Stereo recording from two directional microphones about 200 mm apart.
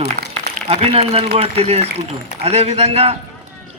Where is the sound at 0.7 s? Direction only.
30° right (ahead or behind).